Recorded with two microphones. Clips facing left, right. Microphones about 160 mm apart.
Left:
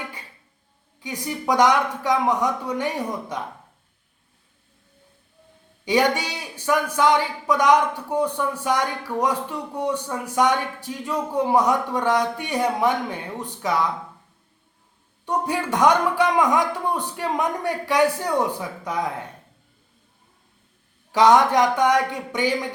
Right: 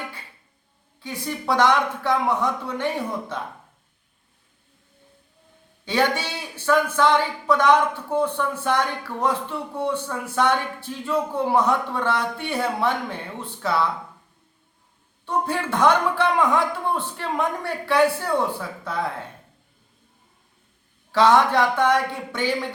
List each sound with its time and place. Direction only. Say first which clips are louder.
0.9 s a man's voice: left 1 dB; 15° left (ahead or behind)
5.8 s a man's voice: left 2 dB; 15° left (ahead or behind)
15.3 s a man's voice: left 1 dB; 15° left (ahead or behind)
21.1 s a man's voice: left 1 dB; 15° left (ahead or behind)